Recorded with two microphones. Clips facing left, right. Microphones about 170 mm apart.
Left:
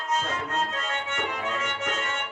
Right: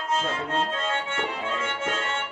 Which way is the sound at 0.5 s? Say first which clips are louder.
Right 4 dB; 30° right (ahead or behind).